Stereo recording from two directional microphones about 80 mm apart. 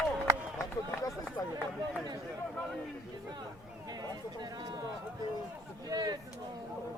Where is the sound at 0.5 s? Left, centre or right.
Left.